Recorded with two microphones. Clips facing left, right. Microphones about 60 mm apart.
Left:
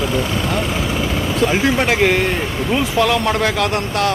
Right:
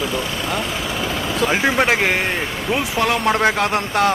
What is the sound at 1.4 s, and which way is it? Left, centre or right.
Speech, centre.